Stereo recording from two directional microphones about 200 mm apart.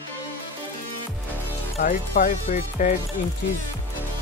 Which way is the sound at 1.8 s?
45° left (ahead or behind).